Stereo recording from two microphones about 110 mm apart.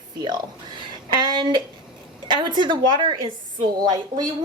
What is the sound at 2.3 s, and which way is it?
A woman's voice, 45° right (ahead or behind).